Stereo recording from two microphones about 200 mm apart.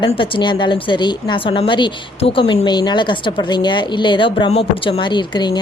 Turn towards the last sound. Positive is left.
turn(degrees=20)  # may be behind; listen again after turning